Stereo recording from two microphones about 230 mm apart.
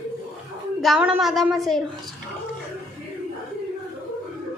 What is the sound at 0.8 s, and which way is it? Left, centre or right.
A woman's voice, centre.